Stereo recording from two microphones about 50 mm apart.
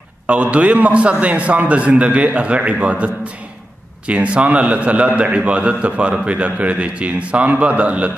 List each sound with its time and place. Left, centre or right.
0.3 s a man's voice: right
4.1 s a man's voice: right